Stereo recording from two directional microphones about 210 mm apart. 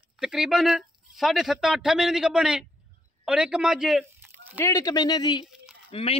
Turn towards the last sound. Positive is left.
turn(degrees=30)  # may be behind; listen again after turning